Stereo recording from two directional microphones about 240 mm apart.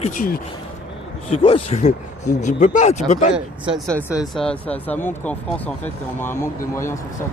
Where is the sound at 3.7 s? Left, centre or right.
Centre.